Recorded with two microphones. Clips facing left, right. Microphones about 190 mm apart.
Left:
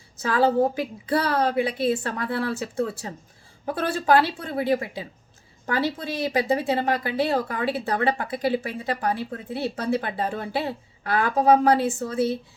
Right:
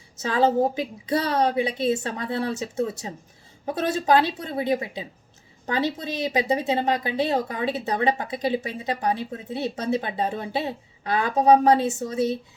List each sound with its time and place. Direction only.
0.2 s speech: 20° right (ahead or behind)